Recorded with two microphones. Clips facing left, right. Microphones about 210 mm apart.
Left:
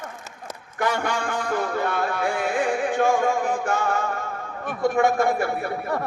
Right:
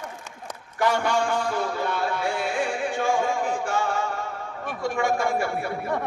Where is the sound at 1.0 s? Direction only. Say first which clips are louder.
Right 2 dB; 55° left (ahead or behind).